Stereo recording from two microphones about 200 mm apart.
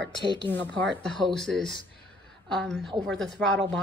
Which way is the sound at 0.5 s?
5° left (ahead or behind).